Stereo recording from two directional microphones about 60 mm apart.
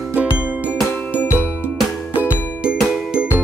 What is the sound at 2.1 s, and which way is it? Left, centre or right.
Music, right.